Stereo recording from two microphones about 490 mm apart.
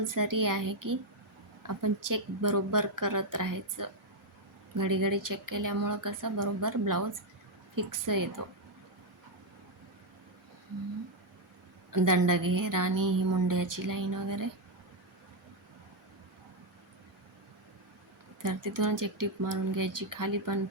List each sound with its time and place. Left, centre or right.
0.1 s a woman's voice: right
8.0 s a woman's voice: right
11.9 s a woman's voice: right
18.8 s a woman's voice: right